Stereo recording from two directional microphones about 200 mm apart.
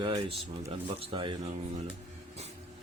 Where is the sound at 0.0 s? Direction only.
25° right (ahead or behind).